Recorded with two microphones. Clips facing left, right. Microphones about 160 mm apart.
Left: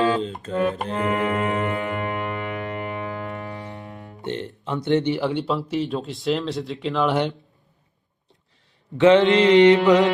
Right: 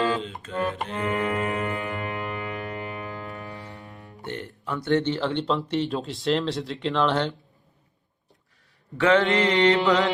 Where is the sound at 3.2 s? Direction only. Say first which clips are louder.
Left 5 dB; 40° left (ahead or behind).